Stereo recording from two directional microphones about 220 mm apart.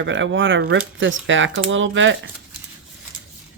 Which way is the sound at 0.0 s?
55° right (ahead or behind).